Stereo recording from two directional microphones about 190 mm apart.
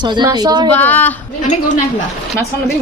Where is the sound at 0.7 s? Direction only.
10° left (ahead or behind).